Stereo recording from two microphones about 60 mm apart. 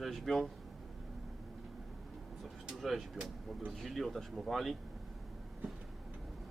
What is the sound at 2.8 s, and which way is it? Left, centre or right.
Speech, centre.